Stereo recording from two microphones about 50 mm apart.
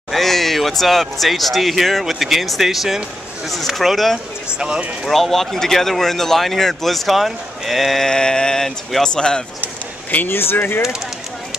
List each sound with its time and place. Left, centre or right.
0.1 s speech: centre
4.6 s speech: centre
5.0 s speech: centre
8.0 s speech: centre
10.1 s speech: left